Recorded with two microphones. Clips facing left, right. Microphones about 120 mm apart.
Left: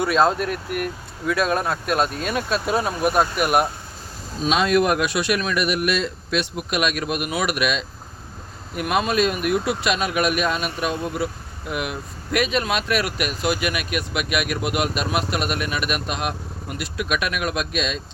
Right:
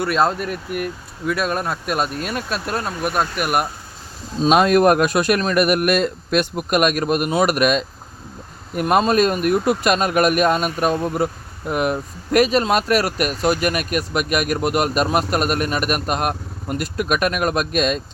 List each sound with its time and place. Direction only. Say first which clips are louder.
0.0 s speech: even; centre (ahead or behind)
4.4 s speech: right 5 dB; 50° right (ahead or behind)